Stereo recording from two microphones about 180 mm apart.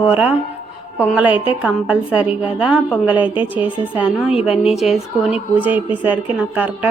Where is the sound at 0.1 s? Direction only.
10° right (ahead or behind).